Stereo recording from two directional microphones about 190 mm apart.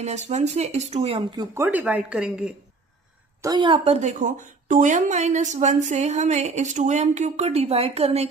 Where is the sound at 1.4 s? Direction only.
10° right (ahead or behind).